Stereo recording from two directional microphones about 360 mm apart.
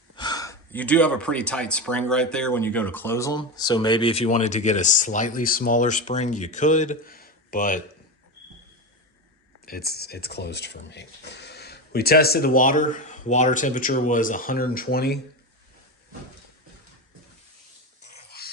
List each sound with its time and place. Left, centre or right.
0.2 s speech: centre
9.6 s speech: left
18.0 s dog: left